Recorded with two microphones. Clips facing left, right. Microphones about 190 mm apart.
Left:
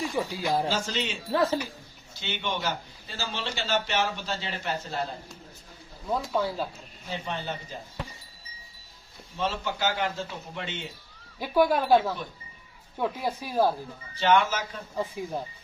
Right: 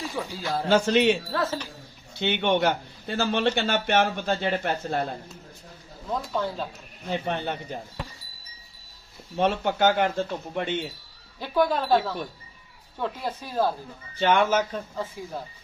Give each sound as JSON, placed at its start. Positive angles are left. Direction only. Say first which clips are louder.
{"t": 0.2, "sound": "speech", "louder": "left 2 dB", "side_deg": 15}
{"t": 0.7, "sound": "a man's voice", "louder": "right 10 dB", "side_deg": -60}
{"t": 1.3, "sound": "speech", "louder": "left 3 dB", "side_deg": 15}
{"t": 2.1, "sound": "a man's voice", "louder": "right 9 dB", "side_deg": -60}
{"t": 6.1, "sound": "speech", "louder": "left 1 dB", "side_deg": 10}
{"t": 7.1, "sound": "a man's voice", "louder": "right 5 dB", "side_deg": -60}
{"t": 9.3, "sound": "a man's voice", "louder": "right 6 dB", "side_deg": -60}
{"t": 11.3, "sound": "speech", "louder": "left 1 dB", "side_deg": 10}
{"t": 14.2, "sound": "a man's voice", "louder": "right 2 dB", "side_deg": -55}
{"t": 14.9, "sound": "speech", "louder": "left 2 dB", "side_deg": 15}